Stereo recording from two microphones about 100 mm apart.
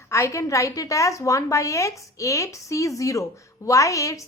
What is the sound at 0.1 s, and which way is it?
A woman's voice, 30° left (ahead or behind).